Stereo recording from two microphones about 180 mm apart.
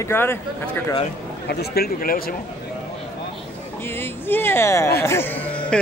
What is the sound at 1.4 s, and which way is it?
Speech, 60° left (ahead or behind).